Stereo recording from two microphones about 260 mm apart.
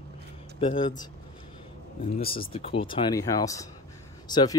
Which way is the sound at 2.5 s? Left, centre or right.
Left.